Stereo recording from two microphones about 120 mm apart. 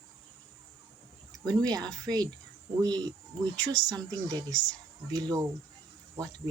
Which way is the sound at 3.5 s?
35° right (ahead or behind).